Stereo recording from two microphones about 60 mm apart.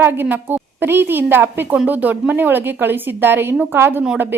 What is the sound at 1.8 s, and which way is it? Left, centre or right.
A woman's voice, right.